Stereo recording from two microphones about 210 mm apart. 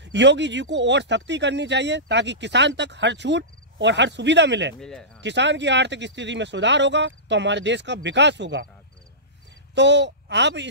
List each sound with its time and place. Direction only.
0.0 s speech: 55° right (ahead or behind)
4.7 s speech: centre (ahead or behind)
5.2 s speech: 55° right (ahead or behind)
9.8 s speech: 55° right (ahead or behind)